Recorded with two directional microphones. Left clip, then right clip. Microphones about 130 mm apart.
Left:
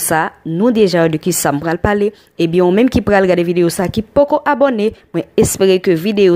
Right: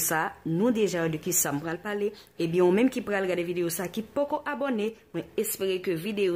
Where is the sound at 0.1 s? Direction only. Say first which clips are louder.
Left 13 dB; 35° left (ahead or behind).